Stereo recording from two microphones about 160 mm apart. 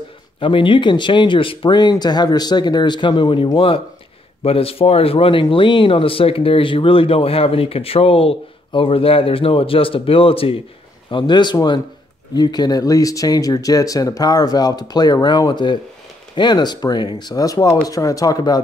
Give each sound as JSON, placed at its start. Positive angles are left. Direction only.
{"t": 0.4, "sound": "speech", "side_deg": 30}